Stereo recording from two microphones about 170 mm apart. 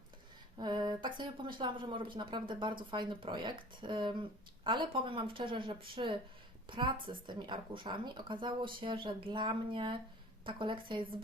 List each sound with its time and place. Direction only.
0.6 s a woman's voice: 25° right (ahead or behind)